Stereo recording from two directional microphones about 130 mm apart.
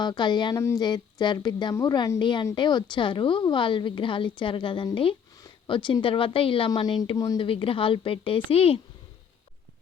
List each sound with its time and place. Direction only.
0.0 s a woman's voice: 35° left (ahead or behind)
0.5 s speech: 25° left (ahead or behind)
0.9 s a woman's voice: 35° left (ahead or behind)
6.7 s a woman's voice: 35° left (ahead or behind)
7.4 s a woman's voice: 45° left (ahead or behind)